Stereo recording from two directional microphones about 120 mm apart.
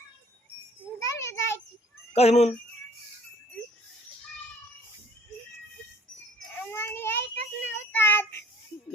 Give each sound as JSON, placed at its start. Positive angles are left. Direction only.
{"t": 1.0, "sound": "a sound", "side_deg": 25}
{"t": 2.1, "sound": "speech", "side_deg": 65}
{"t": 6.6, "sound": "child singing", "side_deg": 20}